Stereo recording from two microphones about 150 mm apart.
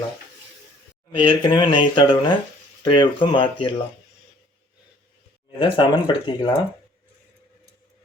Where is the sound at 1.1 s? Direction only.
35° left (ahead or behind).